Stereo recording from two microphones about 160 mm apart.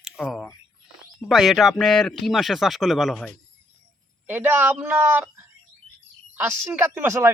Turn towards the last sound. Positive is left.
turn(degrees=-15)  # may be behind; listen again after turning